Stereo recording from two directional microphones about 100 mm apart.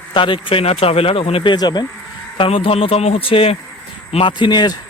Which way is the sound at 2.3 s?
65° left (ahead or behind).